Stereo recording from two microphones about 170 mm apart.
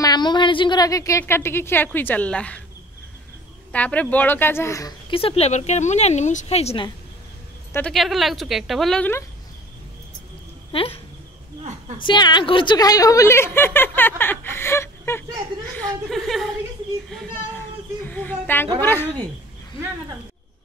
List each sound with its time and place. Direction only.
0.0 s a woman's voice: 25° left (ahead or behind); by 2.6 s 5° left (ahead or behind)
3.7 s a woman's voice: 10° left (ahead or behind)
5.1 s speech: 35° left (ahead or behind)
7.7 s a woman's voice: 5° left (ahead or behind)
10.7 s speech: 35° left (ahead or behind)
12.0 s a woman's voice: 25° left (ahead or behind)
15.7 s a woman's voice: 5° left (ahead or behind)
17.1 s a sound: 5° left (ahead or behind)
18.8 s a woman's voice: 10° left (ahead or behind)